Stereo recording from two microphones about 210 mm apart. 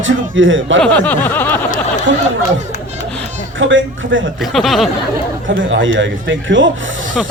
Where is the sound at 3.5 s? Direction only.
65° right (ahead or behind).